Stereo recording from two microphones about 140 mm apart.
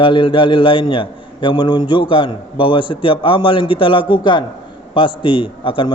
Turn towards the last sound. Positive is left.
turn(degrees=40)  # may be behind; listen again after turning